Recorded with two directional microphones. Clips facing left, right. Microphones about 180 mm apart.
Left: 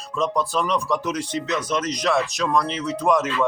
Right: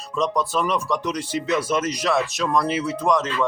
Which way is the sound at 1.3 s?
10° right (ahead or behind).